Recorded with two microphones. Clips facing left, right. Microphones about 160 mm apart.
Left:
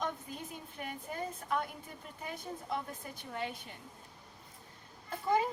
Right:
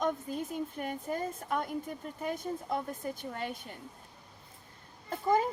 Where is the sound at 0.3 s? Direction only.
45° right (ahead or behind).